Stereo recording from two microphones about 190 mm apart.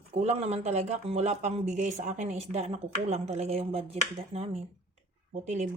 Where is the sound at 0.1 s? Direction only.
35° right (ahead or behind).